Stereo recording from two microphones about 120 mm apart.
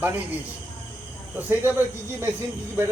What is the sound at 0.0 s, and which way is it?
Speech, 15° right (ahead or behind).